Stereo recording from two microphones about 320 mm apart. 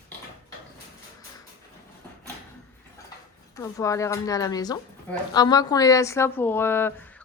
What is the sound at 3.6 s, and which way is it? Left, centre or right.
A woman's voice, centre.